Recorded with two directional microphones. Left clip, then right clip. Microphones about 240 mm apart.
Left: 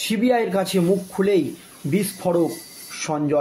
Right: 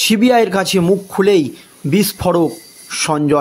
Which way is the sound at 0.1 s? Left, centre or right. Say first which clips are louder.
Right 5 dB; right.